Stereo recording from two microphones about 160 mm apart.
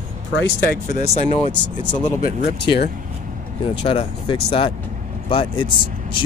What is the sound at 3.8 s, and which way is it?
Speech, 35° left (ahead or behind).